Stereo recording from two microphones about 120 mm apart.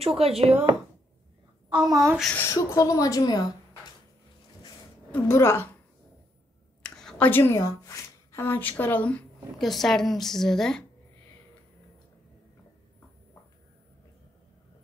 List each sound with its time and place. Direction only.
0.0 s speech: 55° right (ahead or behind)
1.9 s a woman's voice: 25° right (ahead or behind)
2.3 s a woman's voice: 20° left (ahead or behind)
5.1 s a woman's voice: 20° left (ahead or behind)
6.8 s a sound: 5° left (ahead or behind)
7.2 s a woman's voice: 20° left (ahead or behind)
9.6 s a woman's voice: centre (ahead or behind)